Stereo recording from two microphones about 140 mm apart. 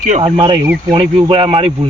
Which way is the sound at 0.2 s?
40° right (ahead or behind).